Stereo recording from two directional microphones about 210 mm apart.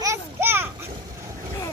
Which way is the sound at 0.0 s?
10° right (ahead or behind).